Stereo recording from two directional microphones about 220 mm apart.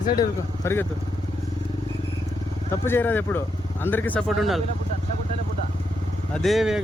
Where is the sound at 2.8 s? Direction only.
10° left (ahead or behind).